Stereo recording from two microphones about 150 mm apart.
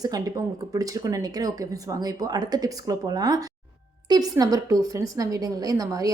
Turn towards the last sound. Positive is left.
turn(degrees=-20)  # may be behind; listen again after turning